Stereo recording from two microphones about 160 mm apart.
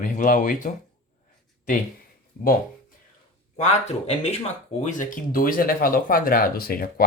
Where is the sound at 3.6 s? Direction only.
45° left (ahead or behind).